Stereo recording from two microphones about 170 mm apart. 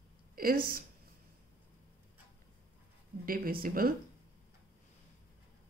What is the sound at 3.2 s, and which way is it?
Speech, 60° right (ahead or behind).